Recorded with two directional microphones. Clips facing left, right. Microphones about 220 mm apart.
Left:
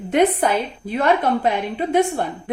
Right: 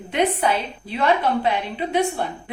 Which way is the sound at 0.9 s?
45° left (ahead or behind).